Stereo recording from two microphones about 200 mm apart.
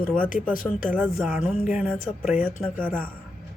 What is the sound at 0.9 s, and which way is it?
Speech, 5° right (ahead or behind).